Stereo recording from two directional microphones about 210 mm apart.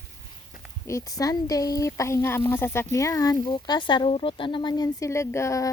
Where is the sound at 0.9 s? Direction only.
15° left (ahead or behind).